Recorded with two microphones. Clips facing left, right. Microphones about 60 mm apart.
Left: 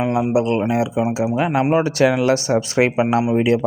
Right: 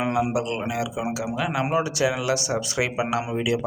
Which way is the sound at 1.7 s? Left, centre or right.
Left.